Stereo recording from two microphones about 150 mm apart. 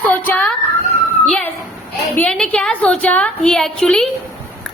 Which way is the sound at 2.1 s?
5° left (ahead or behind).